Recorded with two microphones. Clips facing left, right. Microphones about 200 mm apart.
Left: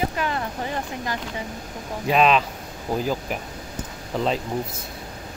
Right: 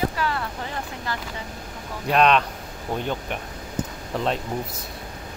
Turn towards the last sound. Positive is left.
turn(degrees=0)  # may be behind; listen again after turning